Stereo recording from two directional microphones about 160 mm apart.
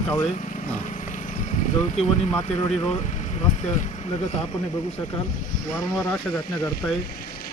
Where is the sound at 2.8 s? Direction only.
45° left (ahead or behind).